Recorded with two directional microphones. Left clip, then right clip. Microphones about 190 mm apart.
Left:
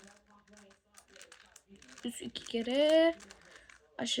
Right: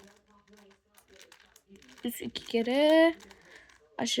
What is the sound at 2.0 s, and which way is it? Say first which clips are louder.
A child's voice: right 5 dB; 30° right (ahead or behind).